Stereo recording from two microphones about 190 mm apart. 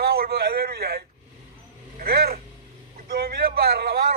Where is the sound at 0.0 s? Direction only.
55° right (ahead or behind).